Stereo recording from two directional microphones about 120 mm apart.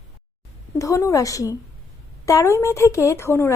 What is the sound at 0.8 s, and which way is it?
A woman's voice, 25° left (ahead or behind).